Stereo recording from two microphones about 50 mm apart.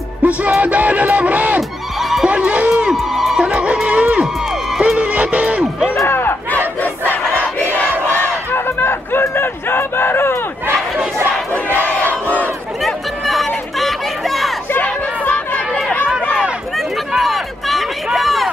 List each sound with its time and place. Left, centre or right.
0.2 s music: right
2.0 s neigh: centre
2.2 s music: right
3.0 s music: centre
3.3 s music: right
6.0 s battle cry: left
6.8 s crowd: left
8.1 s battle cry: left
9.2 s a sound: left
12.8 s chatter: centre
13.7 s a sound: centre
14.7 s chatter: left
16.7 s a sound: centre